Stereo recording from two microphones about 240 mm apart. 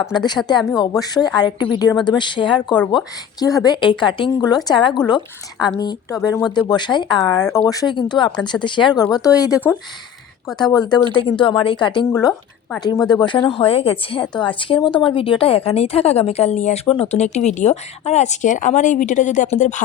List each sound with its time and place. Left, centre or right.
0.1 s speech: centre